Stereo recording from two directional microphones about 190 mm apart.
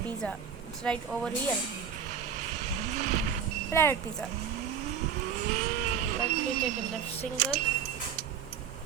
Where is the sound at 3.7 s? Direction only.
10° left (ahead or behind).